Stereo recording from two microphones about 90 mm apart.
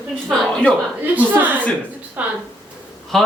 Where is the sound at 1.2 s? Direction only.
20° right (ahead or behind).